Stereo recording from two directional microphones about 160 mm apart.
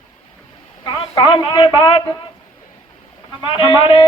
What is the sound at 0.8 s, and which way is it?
A man's voice, 30° left (ahead or behind).